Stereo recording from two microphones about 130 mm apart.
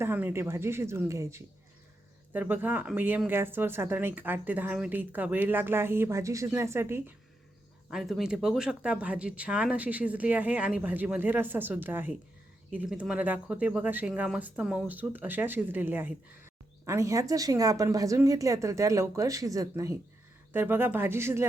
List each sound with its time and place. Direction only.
0.0 s speech: 15° right (ahead or behind)
7.9 s speech: centre (ahead or behind)
16.8 s speech: 25° right (ahead or behind)